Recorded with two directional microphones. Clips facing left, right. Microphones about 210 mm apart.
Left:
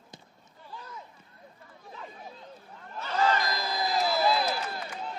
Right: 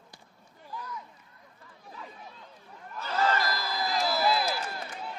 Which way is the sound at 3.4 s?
20° left (ahead or behind).